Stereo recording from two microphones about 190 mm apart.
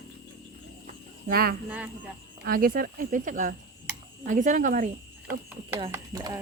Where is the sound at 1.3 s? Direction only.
55° right (ahead or behind).